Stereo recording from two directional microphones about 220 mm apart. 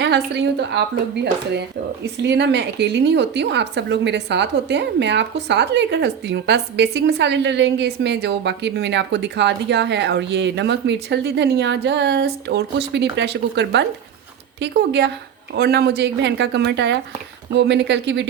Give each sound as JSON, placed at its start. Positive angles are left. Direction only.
{"t": 0.0, "sound": "a woman's voice", "side_deg": -50}